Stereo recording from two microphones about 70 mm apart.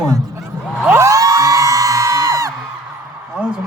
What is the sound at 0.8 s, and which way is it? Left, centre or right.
Music, right.